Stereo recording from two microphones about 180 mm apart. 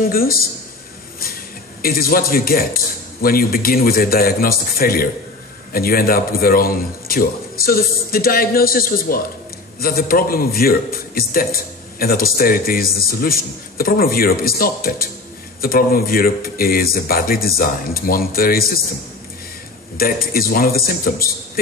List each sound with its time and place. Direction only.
0.1 s a man's voice: 55° left (ahead or behind)
1.8 s a man's voice: 55° left (ahead or behind)
20.0 s a man's voice: 55° left (ahead or behind)